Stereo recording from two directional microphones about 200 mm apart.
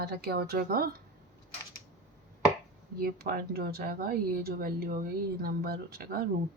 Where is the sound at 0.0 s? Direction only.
55° right (ahead or behind).